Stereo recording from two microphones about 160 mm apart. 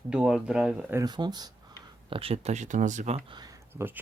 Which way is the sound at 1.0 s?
25° right (ahead or behind).